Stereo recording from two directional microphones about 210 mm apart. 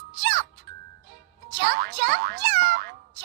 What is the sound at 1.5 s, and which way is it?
Meow, 50° right (ahead or behind).